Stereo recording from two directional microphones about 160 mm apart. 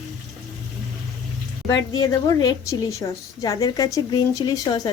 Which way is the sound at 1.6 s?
25° left (ahead or behind).